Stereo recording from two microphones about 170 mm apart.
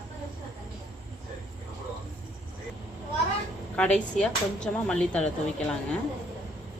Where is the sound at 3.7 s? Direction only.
5° left (ahead or behind).